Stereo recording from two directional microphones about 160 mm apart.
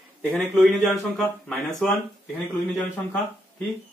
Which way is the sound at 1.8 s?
5° left (ahead or behind).